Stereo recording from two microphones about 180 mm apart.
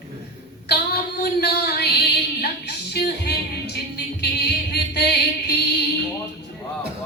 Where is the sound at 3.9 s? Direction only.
65° left (ahead or behind).